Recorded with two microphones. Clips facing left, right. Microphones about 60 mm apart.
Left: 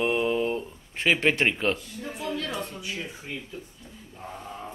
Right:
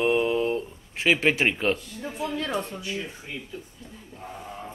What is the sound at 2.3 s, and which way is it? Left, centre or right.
Speech, right.